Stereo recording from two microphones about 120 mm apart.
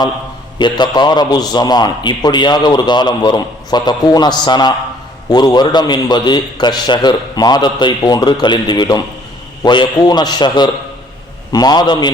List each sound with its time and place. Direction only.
0.6 s a man's voice: 40° left (ahead or behind)